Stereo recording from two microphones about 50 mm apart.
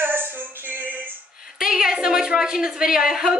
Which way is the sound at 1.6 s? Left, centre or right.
Centre.